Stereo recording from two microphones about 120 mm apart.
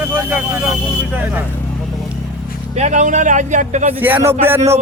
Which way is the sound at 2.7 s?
80° right.